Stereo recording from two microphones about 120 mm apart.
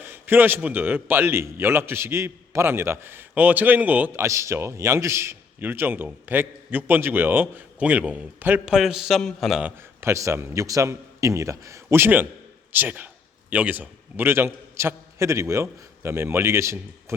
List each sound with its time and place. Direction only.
0.0 s a man's voice: 15° right (ahead or behind); by 9.6 s centre (ahead or behind)
9.6 s a man's voice: 20° right (ahead or behind)